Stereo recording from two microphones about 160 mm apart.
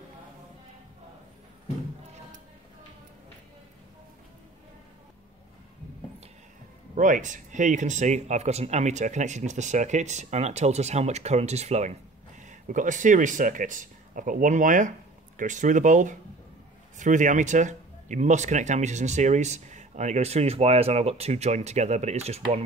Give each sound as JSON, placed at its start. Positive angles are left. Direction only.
{"t": 7.0, "sound": "speech", "side_deg": -50}